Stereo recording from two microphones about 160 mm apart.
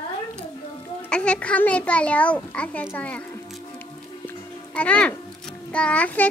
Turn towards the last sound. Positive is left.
turn(degrees=10)  # may be behind; listen again after turning